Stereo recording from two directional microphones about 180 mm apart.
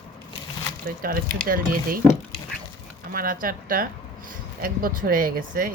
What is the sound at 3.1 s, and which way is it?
Speech, 50° right (ahead or behind).